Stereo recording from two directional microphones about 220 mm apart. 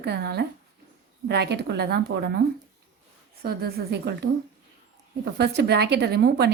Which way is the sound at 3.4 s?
45° right (ahead or behind).